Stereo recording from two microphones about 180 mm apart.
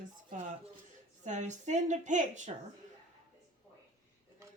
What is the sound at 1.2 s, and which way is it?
Speech, 45° right (ahead or behind).